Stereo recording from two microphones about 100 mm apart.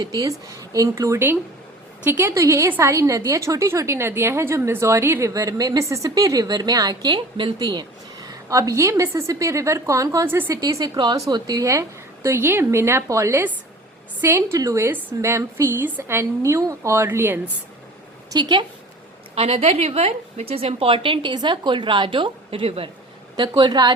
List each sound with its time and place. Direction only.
0.0 s a woman's voice: 35° right (ahead or behind)
10.2 s a woman's voice: 20° right (ahead or behind)
10.5 s a woman's voice: 35° right (ahead or behind)
10.9 s a woman's voice: 50° right (ahead or behind); by 17.4 s 25° right (ahead or behind)
18.3 s a woman's voice: 50° right (ahead or behind)
19.4 s a woman's voice: 70° right (ahead or behind)
23.4 s a woman's voice: 50° right (ahead or behind)